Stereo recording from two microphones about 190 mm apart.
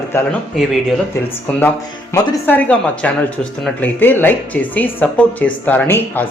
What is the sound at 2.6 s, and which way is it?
Speech, 5° left (ahead or behind).